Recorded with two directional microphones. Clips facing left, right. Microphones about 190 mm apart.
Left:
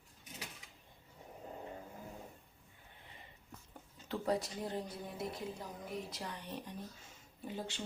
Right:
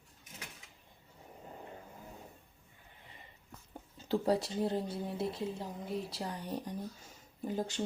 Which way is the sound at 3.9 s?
30° right (ahead or behind).